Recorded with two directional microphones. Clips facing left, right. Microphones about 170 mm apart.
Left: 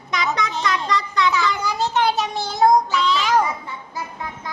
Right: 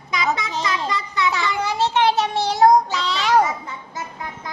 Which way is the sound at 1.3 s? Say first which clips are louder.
Left 1 dB; 25° right (ahead or behind).